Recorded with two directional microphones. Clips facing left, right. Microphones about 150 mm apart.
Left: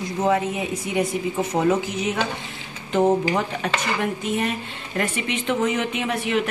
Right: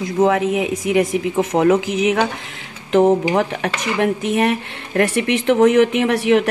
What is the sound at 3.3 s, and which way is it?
Speech, 70° right (ahead or behind).